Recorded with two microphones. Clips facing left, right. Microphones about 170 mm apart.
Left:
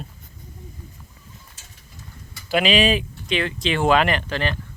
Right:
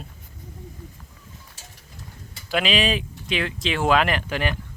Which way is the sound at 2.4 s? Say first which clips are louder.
Left 4 dB; centre (ahead or behind).